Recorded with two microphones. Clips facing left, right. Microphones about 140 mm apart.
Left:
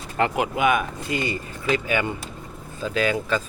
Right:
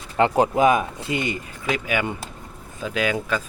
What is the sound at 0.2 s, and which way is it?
Speech, 35° right (ahead or behind).